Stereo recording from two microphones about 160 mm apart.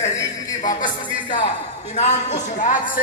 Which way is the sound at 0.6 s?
55° left (ahead or behind).